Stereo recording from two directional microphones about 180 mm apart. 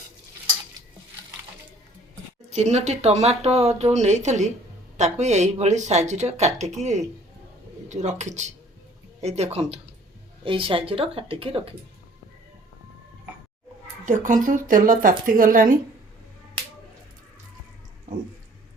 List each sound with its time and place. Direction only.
2.5 s speech: 40° right (ahead or behind)
14.0 s a child's voice: 45° right (ahead or behind)